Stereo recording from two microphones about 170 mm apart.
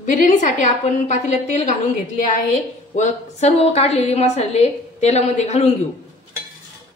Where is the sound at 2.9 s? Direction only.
40° left (ahead or behind).